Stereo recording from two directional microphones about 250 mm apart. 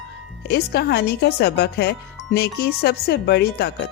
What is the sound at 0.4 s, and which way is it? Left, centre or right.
Speech, left.